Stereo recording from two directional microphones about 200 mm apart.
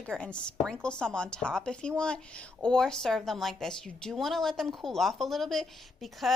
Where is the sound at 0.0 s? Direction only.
5° left (ahead or behind).